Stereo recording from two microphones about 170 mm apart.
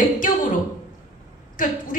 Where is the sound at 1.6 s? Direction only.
50° left (ahead or behind).